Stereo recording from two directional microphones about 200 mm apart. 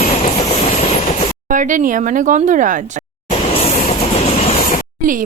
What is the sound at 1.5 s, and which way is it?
Speech, 40° right (ahead or behind).